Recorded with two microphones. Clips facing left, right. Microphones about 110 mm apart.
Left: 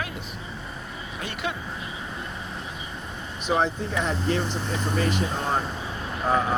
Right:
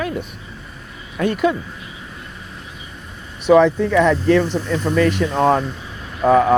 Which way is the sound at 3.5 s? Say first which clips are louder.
Right 12 dB; 90° right.